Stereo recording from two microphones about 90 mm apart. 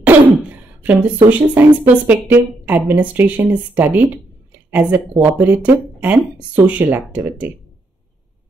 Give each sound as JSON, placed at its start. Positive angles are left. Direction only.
{"t": 0.0, "sound": "throat clearing", "side_deg": -15}
{"t": 2.0, "sound": "speech", "side_deg": -15}